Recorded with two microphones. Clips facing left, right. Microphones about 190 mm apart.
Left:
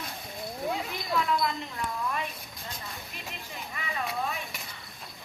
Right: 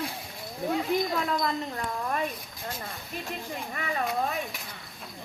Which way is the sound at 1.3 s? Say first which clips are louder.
Right 1 dB; 40° right (ahead or behind).